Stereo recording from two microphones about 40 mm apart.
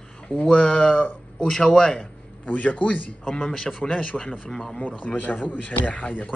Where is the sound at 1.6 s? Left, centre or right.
Centre.